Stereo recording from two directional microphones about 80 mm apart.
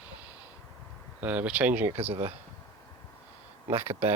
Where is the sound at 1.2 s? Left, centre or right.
Centre.